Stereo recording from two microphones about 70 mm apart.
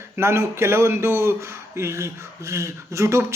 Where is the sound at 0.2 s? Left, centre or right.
Right.